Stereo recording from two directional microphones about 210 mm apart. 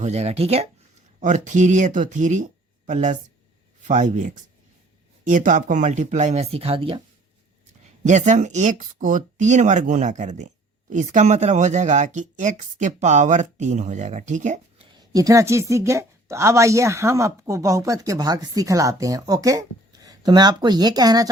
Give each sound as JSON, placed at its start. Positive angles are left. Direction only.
{"t": 0.0, "sound": "speech", "side_deg": -30}
{"t": 8.0, "sound": "speech", "side_deg": -35}
{"t": 14.9, "sound": "a woman's voice", "side_deg": -15}